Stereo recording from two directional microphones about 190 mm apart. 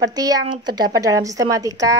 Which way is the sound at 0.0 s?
20° right (ahead or behind).